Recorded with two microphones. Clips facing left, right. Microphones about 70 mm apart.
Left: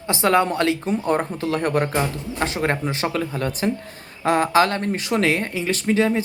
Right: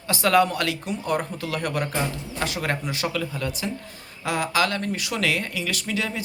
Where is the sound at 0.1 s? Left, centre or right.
Left.